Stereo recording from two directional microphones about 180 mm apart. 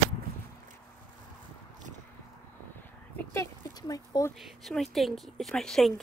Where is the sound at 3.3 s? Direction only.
15° left (ahead or behind).